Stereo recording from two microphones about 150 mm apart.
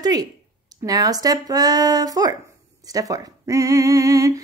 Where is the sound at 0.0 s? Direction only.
25° right (ahead or behind).